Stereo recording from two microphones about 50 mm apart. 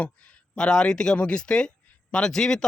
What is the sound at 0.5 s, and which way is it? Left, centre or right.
A man's voice, centre.